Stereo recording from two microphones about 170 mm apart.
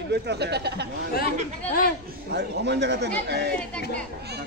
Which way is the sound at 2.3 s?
85° right.